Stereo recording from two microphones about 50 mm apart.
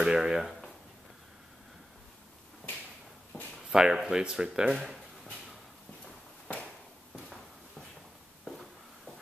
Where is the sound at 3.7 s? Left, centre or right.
Centre.